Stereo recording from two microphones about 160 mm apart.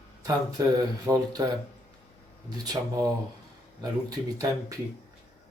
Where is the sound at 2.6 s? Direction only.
20° right (ahead or behind).